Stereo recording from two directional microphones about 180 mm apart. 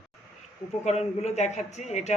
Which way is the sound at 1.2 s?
40° left (ahead or behind).